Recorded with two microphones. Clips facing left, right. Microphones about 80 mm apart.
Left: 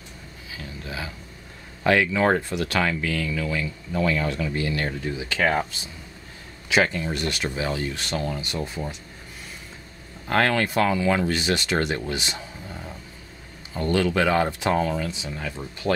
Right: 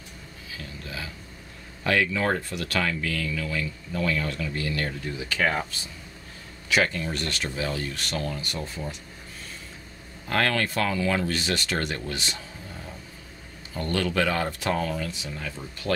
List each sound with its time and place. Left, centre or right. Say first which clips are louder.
0.8 s a sound: left 4 dB; left
1.8 s speech: left 4 dB; left
6.7 s speech: left 3 dB; centre
10.2 s speech: left 3 dB; left